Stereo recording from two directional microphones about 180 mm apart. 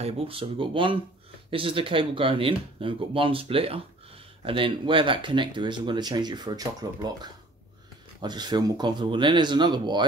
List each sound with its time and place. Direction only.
0.0 s speech: 30° right (ahead or behind)